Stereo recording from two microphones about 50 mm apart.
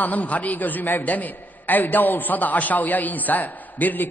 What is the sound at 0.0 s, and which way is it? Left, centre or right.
Music, left.